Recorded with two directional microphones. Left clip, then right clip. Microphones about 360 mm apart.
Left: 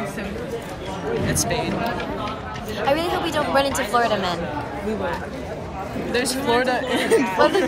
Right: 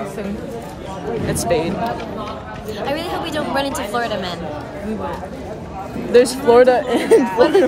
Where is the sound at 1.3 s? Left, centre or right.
Right.